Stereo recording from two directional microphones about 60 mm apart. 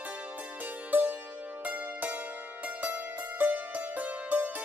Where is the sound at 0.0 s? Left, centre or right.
Right.